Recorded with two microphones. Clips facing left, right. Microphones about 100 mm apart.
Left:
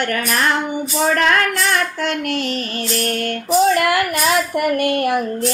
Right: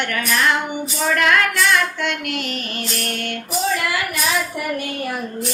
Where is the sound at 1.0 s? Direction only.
35° left (ahead or behind).